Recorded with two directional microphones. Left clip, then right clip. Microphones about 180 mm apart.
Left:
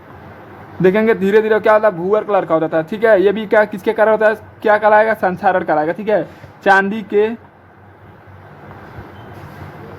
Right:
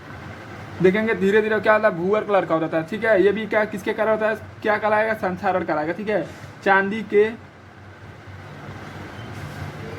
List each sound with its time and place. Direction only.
0.8 s a man's voice: 35° left (ahead or behind)